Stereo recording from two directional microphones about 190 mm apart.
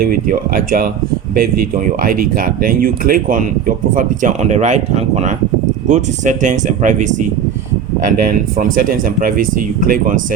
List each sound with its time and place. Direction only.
0.0 s speech: 50° right (ahead or behind)